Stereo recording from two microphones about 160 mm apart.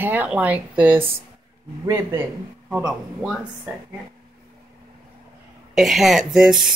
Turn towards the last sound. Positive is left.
turn(degrees=0)  # may be behind; listen again after turning